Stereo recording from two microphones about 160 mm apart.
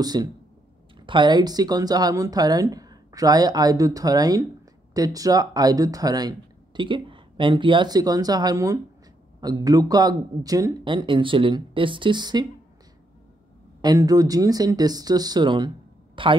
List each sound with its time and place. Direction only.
0.0 s speech: 25° right (ahead or behind)
13.7 s speech: 25° right (ahead or behind)